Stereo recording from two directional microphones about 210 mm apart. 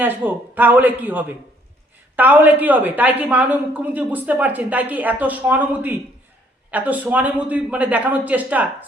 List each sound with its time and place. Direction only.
0.0 s a woman's voice: 10° right (ahead or behind)